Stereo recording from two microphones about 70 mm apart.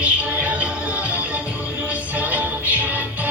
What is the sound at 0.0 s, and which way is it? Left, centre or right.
Music, centre.